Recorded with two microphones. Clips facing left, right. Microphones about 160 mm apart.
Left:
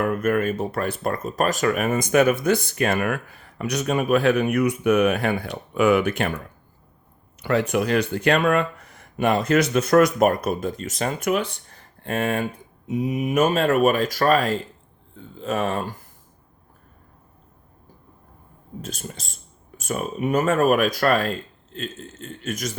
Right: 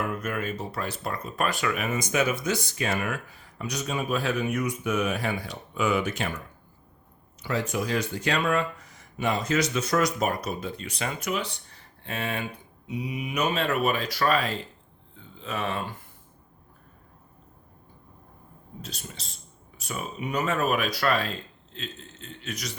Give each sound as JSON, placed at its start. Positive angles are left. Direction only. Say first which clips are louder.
{"t": 0.0, "sound": "speech", "louder": "left 9 dB", "side_deg": 55}
{"t": 7.4, "sound": "speech", "louder": "left 7 dB", "side_deg": 65}
{"t": 18.8, "sound": "speech", "louder": "left 7 dB", "side_deg": 45}